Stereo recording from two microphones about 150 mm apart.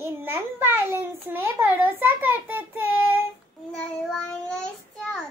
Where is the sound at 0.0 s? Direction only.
15° right (ahead or behind).